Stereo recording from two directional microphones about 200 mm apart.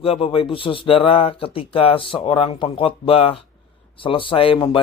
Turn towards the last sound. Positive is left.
turn(degrees=25)  # may be behind; listen again after turning